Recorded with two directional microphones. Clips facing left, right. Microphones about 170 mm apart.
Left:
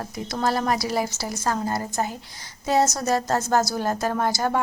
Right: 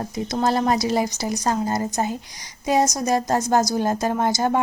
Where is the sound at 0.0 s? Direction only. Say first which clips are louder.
Right 3 dB; 20° right (ahead or behind).